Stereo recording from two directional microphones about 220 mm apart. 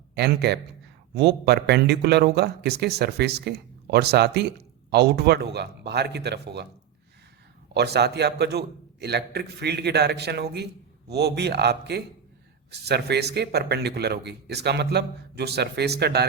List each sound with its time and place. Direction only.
0.2 s speech: 50° right (ahead or behind)
7.7 s speech: 50° right (ahead or behind)